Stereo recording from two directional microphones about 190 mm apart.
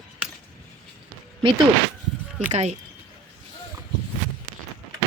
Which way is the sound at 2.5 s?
35° right (ahead or behind).